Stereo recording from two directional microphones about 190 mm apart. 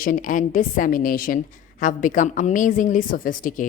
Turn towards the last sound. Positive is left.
turn(degrees=45)  # may be behind; listen again after turning